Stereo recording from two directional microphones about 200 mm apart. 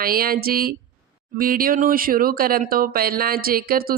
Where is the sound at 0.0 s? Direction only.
45° right (ahead or behind).